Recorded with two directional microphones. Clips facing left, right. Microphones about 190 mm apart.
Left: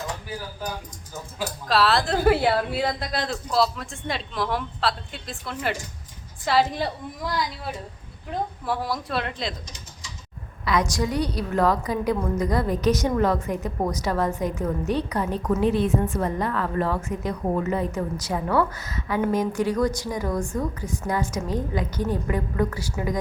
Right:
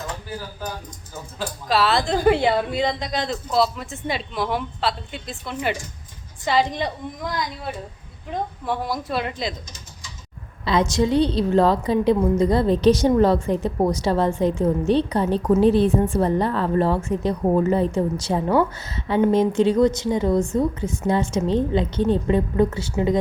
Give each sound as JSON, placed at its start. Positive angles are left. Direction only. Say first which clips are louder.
{"t": 1.1, "sound": "a woman's voice", "louder": "right 1 dB", "side_deg": 10}
{"t": 10.7, "sound": "a woman's voice", "louder": "right 5 dB", "side_deg": -25}